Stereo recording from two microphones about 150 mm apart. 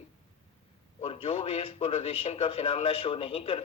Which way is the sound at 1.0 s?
40° left (ahead or behind).